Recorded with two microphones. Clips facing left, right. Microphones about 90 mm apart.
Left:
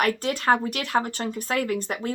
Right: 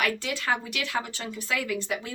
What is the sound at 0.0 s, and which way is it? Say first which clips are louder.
Speech: left 5 dB; 45° left (ahead or behind).